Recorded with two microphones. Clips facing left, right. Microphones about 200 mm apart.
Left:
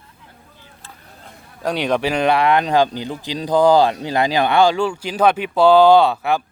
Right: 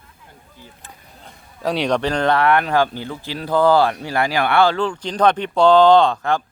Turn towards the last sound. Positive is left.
turn(degrees=10)  # may be behind; listen again after turning